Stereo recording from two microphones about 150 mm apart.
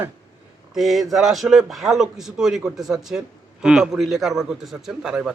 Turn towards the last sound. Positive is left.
turn(degrees=-5)  # may be behind; listen again after turning